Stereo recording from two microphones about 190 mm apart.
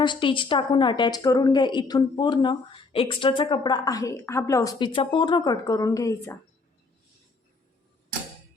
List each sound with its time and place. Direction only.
0.0 s a woman's voice: 25° left (ahead or behind)